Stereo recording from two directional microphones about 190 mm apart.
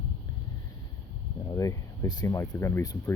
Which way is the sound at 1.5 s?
15° left (ahead or behind).